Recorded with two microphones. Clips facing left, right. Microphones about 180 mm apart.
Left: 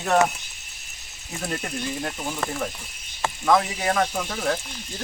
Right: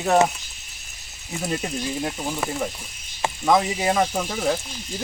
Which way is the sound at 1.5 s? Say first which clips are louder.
Right 2 dB; 10° right (ahead or behind).